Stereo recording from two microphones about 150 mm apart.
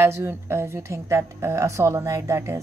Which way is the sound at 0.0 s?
15° right (ahead or behind).